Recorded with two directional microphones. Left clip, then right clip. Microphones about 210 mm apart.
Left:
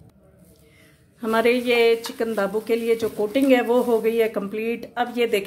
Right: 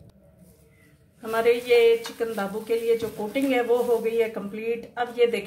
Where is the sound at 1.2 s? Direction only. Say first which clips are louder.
Left 2 dB; 50° left (ahead or behind).